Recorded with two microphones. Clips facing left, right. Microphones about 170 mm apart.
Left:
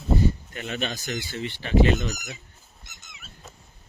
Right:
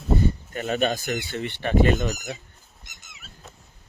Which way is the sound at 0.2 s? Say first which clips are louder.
Even; 50° right (ahead or behind).